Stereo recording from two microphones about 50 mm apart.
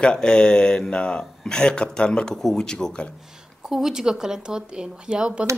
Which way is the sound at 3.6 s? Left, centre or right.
Centre.